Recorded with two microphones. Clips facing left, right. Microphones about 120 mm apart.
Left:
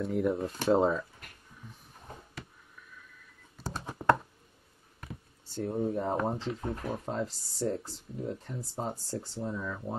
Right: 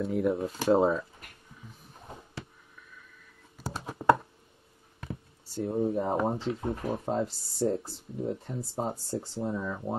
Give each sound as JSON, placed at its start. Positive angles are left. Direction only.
{"t": 0.0, "sound": "speech", "side_deg": 0}
{"t": 3.5, "sound": "a sound", "side_deg": -5}
{"t": 5.5, "sound": "speech", "side_deg": -5}
{"t": 7.6, "sound": "speech", "side_deg": -40}
{"t": 8.2, "sound": "speech", "side_deg": -25}